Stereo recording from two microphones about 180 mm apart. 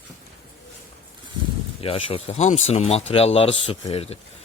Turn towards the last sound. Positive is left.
turn(degrees=35)  # may be behind; listen again after turning